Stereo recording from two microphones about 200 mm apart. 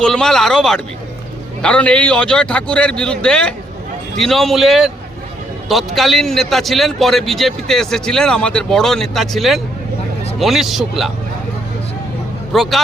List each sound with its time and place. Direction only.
0.0 s a man's voice: 5° left (ahead or behind)
12.5 s a man's voice: centre (ahead or behind)